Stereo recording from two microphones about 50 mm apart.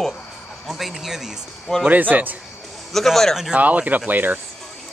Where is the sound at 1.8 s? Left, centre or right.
Right.